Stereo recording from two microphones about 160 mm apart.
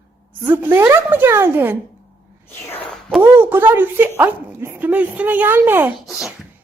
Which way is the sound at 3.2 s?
15° right (ahead or behind).